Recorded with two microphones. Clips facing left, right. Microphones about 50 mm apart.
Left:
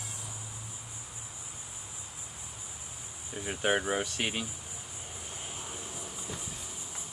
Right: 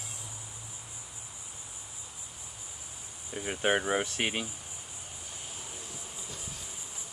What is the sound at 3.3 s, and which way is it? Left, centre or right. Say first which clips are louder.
Speech: right 1 dB; centre.